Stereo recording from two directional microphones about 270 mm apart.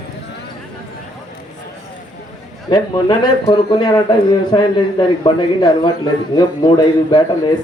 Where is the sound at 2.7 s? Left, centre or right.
Centre.